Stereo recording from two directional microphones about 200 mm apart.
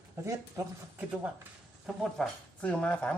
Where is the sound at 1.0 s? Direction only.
5° right (ahead or behind).